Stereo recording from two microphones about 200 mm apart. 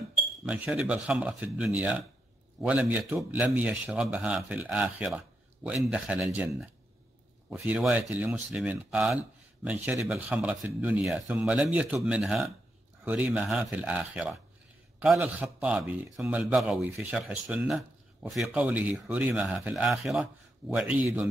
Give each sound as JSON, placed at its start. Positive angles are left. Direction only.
{"t": 0.5, "sound": "speech", "side_deg": -5}